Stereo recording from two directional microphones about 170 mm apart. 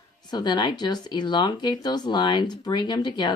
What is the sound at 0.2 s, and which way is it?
A woman's voice, 25° left (ahead or behind).